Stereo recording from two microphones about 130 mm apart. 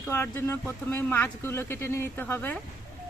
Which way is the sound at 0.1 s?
20° left (ahead or behind).